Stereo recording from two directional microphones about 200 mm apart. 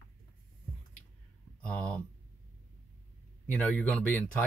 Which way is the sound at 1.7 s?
5° left (ahead or behind).